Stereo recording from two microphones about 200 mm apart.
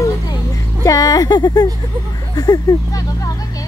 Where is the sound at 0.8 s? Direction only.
15° left (ahead or behind).